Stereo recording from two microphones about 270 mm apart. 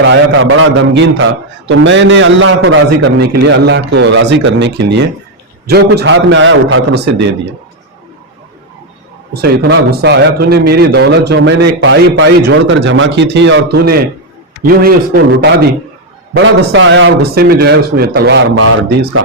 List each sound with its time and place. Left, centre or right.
0.0 s a man's voice: right
9.3 s a man's voice: right
16.3 s a man's voice: right